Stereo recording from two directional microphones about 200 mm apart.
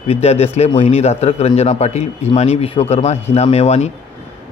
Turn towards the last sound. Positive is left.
turn(degrees=30)  # may be behind; listen again after turning